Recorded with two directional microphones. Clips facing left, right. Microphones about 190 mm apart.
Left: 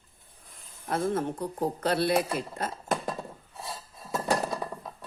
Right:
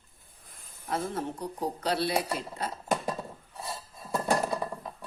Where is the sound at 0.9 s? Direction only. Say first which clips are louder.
Left 4 dB; 50° left (ahead or behind).